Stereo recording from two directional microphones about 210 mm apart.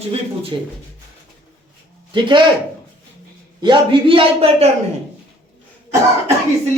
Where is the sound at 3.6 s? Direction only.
25° right (ahead or behind).